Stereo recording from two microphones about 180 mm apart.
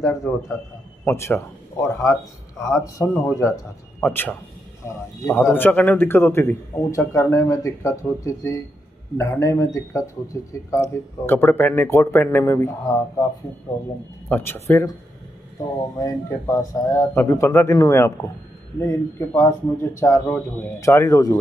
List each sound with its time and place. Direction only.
0.0 s a man's voice: 15° left (ahead or behind)
14.3 s a man's voice: 10° left (ahead or behind)
16.0 s a man's voice: 15° left (ahead or behind)